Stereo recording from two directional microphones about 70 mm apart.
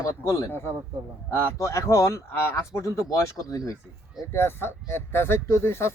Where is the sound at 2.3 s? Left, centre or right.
Left.